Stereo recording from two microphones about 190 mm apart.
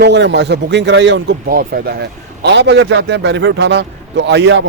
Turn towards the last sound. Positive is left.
turn(degrees=-65)  # may be behind; listen again after turning